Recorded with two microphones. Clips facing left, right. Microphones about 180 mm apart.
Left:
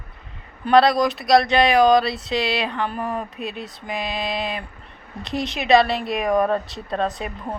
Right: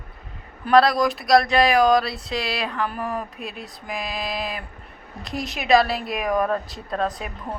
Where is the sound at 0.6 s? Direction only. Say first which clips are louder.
Left 1 dB; centre (ahead or behind).